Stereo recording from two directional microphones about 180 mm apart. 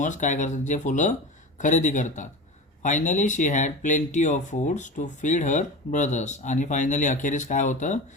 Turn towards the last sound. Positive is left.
turn(degrees=45)  # may be behind; listen again after turning